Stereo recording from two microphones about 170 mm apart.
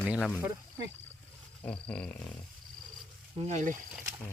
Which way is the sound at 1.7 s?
5° left (ahead or behind).